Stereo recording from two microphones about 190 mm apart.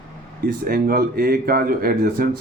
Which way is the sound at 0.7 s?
55° right (ahead or behind).